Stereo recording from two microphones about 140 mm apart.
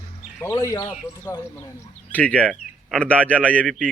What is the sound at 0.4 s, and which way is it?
Speech, 20° left (ahead or behind).